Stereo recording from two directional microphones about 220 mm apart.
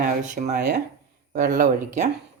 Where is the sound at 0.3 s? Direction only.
35° right (ahead or behind).